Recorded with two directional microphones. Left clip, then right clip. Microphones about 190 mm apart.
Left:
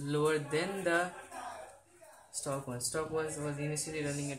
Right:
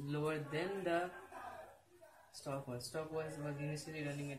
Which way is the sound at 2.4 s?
45° left (ahead or behind).